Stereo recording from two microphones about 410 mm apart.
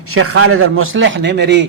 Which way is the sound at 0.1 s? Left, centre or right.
Right.